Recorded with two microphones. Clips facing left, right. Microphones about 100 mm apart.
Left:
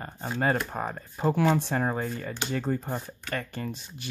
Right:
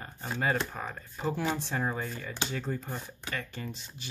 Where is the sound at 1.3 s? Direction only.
60° left (ahead or behind).